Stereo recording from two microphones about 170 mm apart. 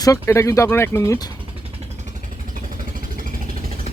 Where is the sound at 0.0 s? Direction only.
20° left (ahead or behind).